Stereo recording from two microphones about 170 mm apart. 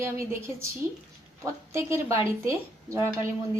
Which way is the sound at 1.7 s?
15° right (ahead or behind).